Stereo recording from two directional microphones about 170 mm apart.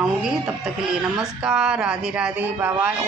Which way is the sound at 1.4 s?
5° right (ahead or behind).